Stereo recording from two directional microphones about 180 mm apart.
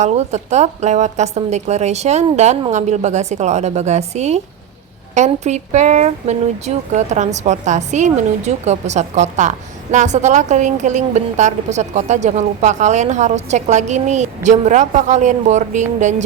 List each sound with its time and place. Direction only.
0.0 s a woman's voice: 40° right (ahead or behind)